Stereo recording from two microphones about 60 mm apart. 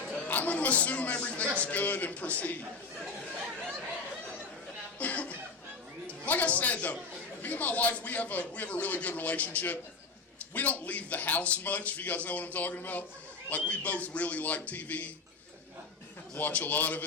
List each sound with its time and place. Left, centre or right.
0.3 s a man's voice: left
4.9 s chuckle: left
6.1 s a man's voice: left
16.3 s a man's voice: left